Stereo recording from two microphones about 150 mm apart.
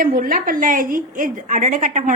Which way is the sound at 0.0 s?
65° right (ahead or behind).